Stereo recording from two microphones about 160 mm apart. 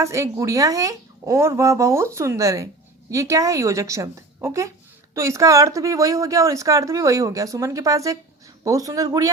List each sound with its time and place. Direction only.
0.0 s speech: 20° right (ahead or behind)